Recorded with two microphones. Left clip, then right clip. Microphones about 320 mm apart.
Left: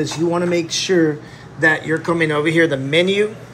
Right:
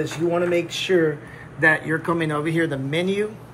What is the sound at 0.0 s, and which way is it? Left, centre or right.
Speech, left.